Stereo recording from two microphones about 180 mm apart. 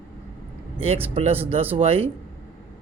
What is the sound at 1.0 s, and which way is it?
A man's voice, 30° right (ahead or behind).